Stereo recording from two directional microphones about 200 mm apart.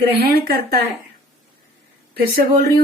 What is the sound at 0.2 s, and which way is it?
Speech, 50° right (ahead or behind).